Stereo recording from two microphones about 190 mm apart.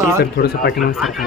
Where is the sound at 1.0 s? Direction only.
Centre (ahead or behind).